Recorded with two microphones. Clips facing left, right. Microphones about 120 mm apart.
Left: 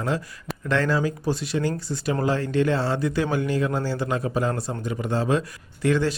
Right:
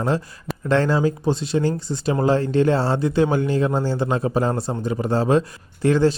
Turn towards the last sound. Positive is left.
turn(degrees=-30)  # may be behind; listen again after turning